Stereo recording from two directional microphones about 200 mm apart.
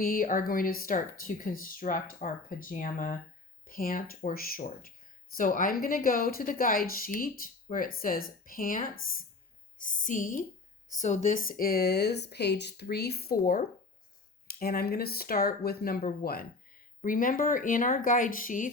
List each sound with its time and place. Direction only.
0.0 s a woman's voice: 45° left (ahead or behind)